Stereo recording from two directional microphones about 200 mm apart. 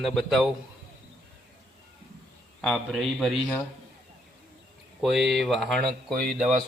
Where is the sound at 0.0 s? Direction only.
Centre (ahead or behind).